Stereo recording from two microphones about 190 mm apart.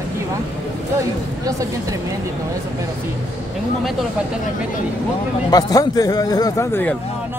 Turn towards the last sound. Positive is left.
turn(degrees=15)  # may be behind; listen again after turning